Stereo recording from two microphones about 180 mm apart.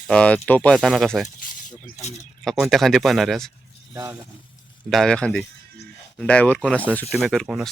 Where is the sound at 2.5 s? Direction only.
Centre (ahead or behind).